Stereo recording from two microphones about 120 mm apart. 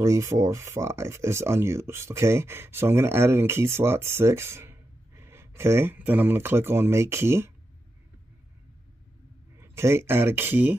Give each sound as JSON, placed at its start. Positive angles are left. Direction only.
{"t": 0.0, "sound": "speech", "side_deg": -25}
{"t": 9.6, "sound": "speech", "side_deg": -20}